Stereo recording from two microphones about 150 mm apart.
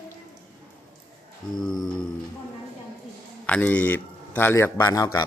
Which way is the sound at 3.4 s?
10° left (ahead or behind).